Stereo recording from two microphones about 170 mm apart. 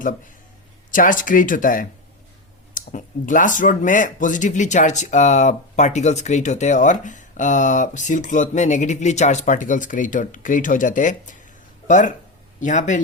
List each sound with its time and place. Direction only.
0.9 s speech: 50° left (ahead or behind)